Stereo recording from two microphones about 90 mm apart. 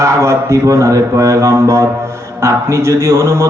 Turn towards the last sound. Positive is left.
turn(degrees=-30)  # may be behind; listen again after turning